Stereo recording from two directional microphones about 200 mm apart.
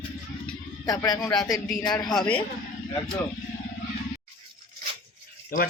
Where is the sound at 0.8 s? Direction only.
20° left (ahead or behind).